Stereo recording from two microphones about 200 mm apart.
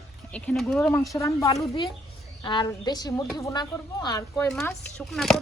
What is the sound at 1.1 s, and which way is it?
Speech, 15° left (ahead or behind).